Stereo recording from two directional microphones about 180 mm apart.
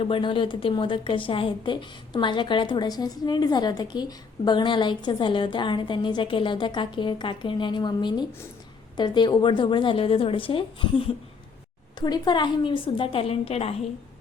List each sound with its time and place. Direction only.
0.0 s a woman's voice: 30° left (ahead or behind)